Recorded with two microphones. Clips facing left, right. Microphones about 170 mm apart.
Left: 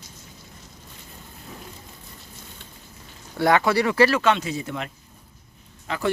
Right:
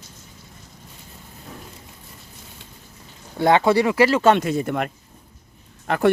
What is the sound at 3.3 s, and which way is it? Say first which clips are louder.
Speech: right 3 dB; 25° right (ahead or behind).